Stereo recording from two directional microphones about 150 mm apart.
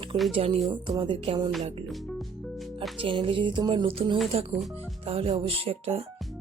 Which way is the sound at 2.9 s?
35° right (ahead or behind).